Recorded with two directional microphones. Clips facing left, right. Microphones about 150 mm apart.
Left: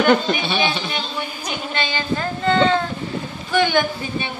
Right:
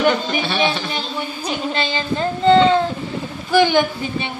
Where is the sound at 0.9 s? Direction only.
30° right (ahead or behind).